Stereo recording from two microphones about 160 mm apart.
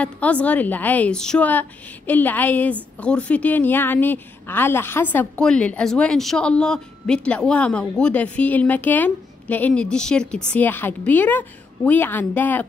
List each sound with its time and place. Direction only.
0.0 s a woman's voice: 10° left (ahead or behind)